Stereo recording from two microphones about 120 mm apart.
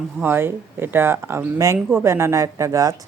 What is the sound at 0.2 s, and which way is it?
Speech, 20° right (ahead or behind).